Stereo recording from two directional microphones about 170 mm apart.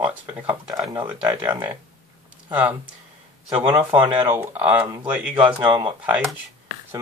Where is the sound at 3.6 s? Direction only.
30° right (ahead or behind).